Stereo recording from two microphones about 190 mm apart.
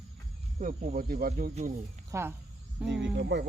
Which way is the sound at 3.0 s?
65° right (ahead or behind).